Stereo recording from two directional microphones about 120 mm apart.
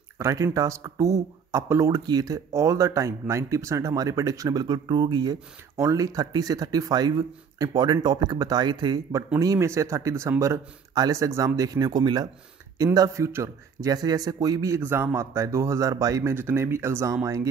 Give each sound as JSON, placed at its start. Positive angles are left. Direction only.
{"t": 0.2, "sound": "speech", "side_deg": -25}
{"t": 9.4, "sound": "a man's voice", "side_deg": -25}